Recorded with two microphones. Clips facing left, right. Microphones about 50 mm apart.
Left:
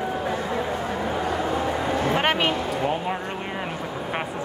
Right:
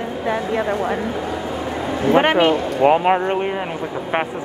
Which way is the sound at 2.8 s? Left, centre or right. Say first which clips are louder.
Right 15 dB; right.